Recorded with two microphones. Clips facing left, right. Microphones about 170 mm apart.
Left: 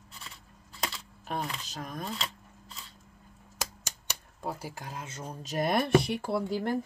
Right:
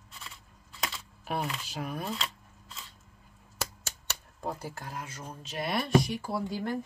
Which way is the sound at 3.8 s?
10° left (ahead or behind).